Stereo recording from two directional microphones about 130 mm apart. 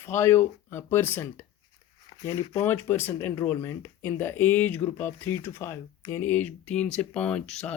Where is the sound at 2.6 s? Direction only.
20° left (ahead or behind).